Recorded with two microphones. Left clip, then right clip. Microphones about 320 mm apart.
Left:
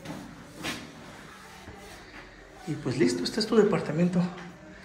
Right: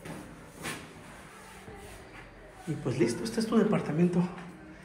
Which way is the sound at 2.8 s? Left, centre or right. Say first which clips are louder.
Left 3 dB; centre.